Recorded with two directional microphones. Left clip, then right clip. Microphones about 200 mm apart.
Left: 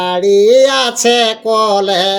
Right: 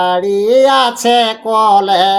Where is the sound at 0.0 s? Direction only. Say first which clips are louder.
Left 3 dB; 15° left (ahead or behind).